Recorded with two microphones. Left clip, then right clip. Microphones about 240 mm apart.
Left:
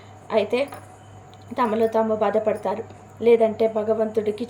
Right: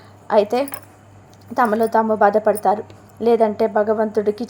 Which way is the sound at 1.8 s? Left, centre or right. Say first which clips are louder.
Right 5 dB; right.